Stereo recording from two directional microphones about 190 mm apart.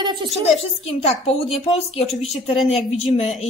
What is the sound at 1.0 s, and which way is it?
Speech, 30° left (ahead or behind).